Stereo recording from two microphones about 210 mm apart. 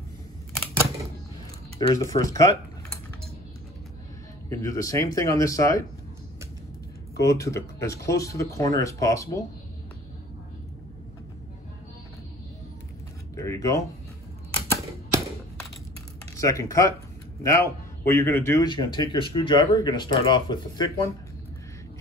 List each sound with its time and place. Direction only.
1.8 s speech: 15° left (ahead or behind)
4.5 s speech: 15° left (ahead or behind)
7.2 s speech: 15° left (ahead or behind)
13.3 s a sound: 15° left (ahead or behind)
16.3 s a man's voice: 15° left (ahead or behind)